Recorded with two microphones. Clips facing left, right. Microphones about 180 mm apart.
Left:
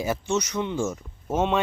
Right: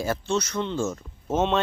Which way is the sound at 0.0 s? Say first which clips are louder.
Even; 15° left (ahead or behind).